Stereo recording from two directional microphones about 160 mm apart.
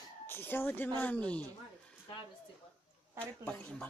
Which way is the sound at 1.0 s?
10° left (ahead or behind).